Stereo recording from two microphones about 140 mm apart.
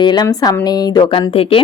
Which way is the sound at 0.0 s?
30° left (ahead or behind).